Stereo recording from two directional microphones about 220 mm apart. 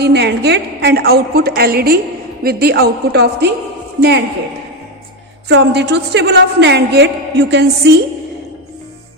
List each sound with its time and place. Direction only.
0.0 s a woman's voice: 50° right (ahead or behind)
5.5 s a woman's voice: 50° right (ahead or behind)